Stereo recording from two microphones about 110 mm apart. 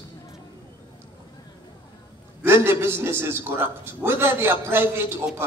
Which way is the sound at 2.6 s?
20° right (ahead or behind).